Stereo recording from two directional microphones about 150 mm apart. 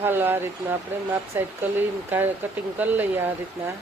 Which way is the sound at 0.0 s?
15° right (ahead or behind).